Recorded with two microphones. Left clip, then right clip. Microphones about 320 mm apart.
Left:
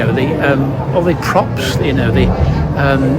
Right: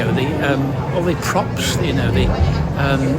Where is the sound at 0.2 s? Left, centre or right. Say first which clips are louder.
Left 6 dB; centre.